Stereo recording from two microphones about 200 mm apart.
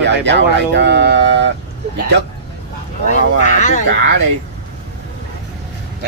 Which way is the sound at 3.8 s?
55° right (ahead or behind).